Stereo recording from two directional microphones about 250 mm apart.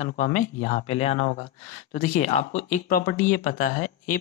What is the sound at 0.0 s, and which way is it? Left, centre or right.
Speech, left.